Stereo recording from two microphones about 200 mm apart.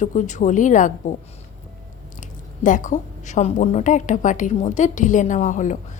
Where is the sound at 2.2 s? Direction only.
40° left (ahead or behind).